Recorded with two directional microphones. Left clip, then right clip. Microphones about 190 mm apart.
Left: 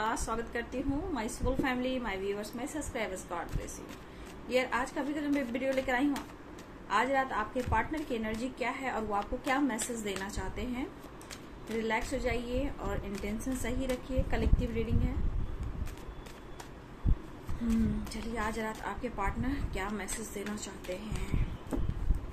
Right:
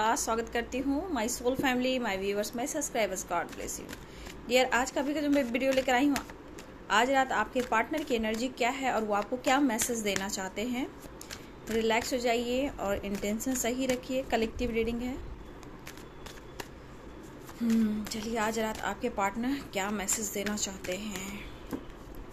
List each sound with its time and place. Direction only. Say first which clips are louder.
0.0 s a woman's voice: right 5 dB; 50° right (ahead or behind)
4.5 s a woman's voice: right 5 dB; 50° right (ahead or behind)
18.1 s a woman's voice: right 6 dB; 55° right (ahead or behind)